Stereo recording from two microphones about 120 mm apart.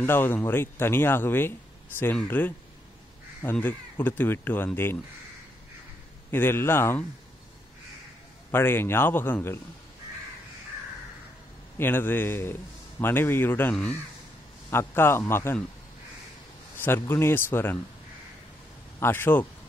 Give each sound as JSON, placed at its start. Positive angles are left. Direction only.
{"t": 0.0, "sound": "speech", "side_deg": 15}
{"t": 6.3, "sound": "a man's voice", "side_deg": 20}
{"t": 8.5, "sound": "a man's voice", "side_deg": 20}
{"t": 11.8, "sound": "a man's voice", "side_deg": 15}
{"t": 16.7, "sound": "a man's voice", "side_deg": 20}
{"t": 18.9, "sound": "a man's voice", "side_deg": 20}